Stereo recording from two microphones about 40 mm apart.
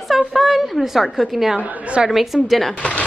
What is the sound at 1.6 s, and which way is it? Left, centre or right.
Speech, right.